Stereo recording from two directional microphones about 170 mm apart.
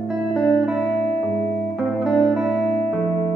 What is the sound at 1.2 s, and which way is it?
Music, 45° right (ahead or behind).